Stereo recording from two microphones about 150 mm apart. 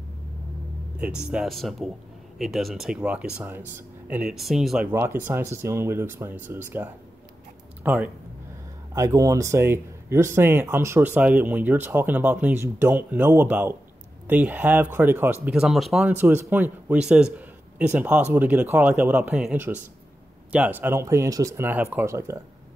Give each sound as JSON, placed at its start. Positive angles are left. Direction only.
{"t": 0.9, "sound": "speech", "side_deg": -5}
{"t": 4.9, "sound": "speech", "side_deg": -15}
{"t": 8.9, "sound": "speech", "side_deg": -20}
{"t": 16.2, "sound": "a man's voice", "side_deg": -15}